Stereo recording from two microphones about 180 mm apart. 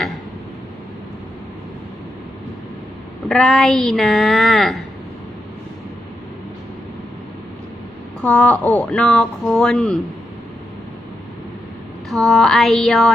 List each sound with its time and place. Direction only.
3.2 s speech: 5° left (ahead or behind)
8.2 s speech: 5° left (ahead or behind)
12.0 s speech: centre (ahead or behind)